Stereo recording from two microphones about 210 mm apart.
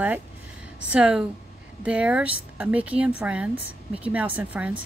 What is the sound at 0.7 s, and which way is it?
A woman's voice, 5° right (ahead or behind).